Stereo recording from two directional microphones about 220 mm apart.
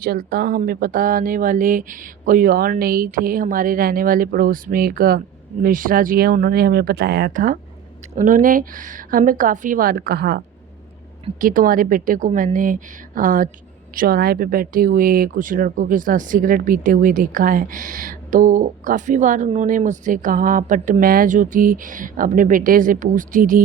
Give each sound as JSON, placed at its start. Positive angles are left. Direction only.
{"t": 0.0, "sound": "speech", "side_deg": -40}